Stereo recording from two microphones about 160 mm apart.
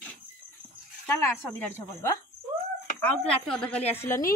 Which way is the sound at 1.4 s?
15° left (ahead or behind).